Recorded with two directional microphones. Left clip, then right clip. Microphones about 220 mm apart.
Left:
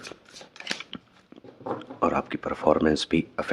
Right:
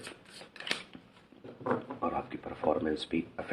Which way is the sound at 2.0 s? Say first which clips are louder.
Left 9 dB; 40° left (ahead or behind).